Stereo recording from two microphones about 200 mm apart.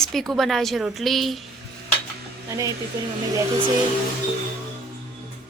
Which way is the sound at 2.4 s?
15° right (ahead or behind).